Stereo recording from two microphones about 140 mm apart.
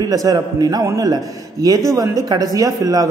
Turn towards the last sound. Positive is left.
turn(degrees=-25)  # may be behind; listen again after turning